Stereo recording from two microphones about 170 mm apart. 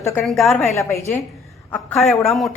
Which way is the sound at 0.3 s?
Centre (ahead or behind).